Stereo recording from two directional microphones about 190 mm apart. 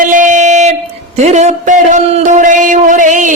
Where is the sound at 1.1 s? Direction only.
35° right (ahead or behind).